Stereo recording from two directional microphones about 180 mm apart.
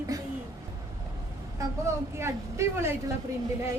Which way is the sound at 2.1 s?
15° right (ahead or behind).